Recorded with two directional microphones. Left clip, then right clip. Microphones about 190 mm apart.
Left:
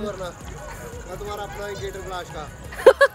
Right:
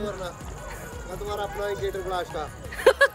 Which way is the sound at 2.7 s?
5° left (ahead or behind).